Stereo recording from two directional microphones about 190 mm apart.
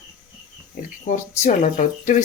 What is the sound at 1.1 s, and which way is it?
Speech, 40° left (ahead or behind).